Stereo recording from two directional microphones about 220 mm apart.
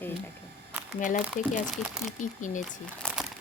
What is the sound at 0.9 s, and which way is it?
Speech, 35° left (ahead or behind).